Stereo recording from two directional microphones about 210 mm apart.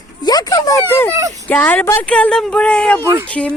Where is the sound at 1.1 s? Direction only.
15° right (ahead or behind).